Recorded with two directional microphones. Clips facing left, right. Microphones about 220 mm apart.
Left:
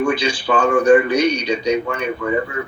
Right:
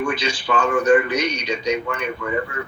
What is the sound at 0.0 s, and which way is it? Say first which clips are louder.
Speech: left 5 dB; 30° left (ahead or behind).